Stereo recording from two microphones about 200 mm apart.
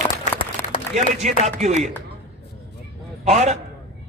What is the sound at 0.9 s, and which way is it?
Speech, 35° right (ahead or behind).